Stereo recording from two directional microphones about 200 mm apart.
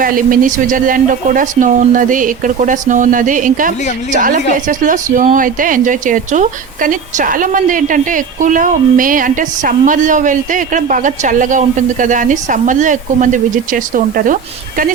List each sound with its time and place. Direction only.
0.0 s a woman's voice: 45° right (ahead or behind)